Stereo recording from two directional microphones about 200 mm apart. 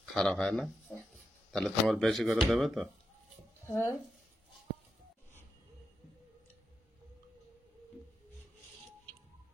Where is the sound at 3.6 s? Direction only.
15° left (ahead or behind).